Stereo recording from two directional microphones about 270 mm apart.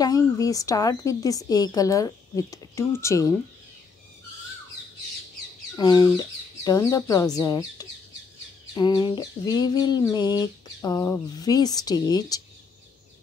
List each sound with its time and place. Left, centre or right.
0.0 s a woman's voice: centre
5.8 s a woman's voice: centre